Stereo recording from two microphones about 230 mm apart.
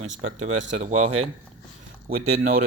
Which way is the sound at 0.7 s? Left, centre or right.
Right.